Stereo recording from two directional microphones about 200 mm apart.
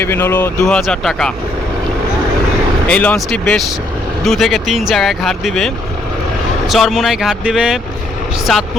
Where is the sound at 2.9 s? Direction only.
5° left (ahead or behind).